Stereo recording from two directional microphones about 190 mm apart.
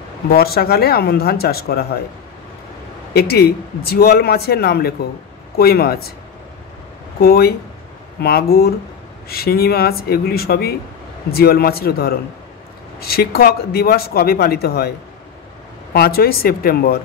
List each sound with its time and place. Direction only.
0.3 s a man's voice: 55° left (ahead or behind)
3.1 s a man's voice: 55° left (ahead or behind)
7.2 s a man's voice: 55° left (ahead or behind)
15.9 s speech: 55° left (ahead or behind)